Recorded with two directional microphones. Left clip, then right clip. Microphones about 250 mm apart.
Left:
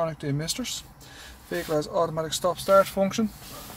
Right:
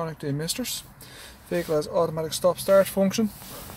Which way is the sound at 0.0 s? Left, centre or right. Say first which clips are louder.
Left 2 dB; centre.